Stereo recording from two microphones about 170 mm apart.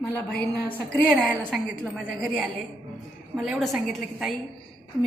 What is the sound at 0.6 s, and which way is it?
A man's voice, 10° left (ahead or behind).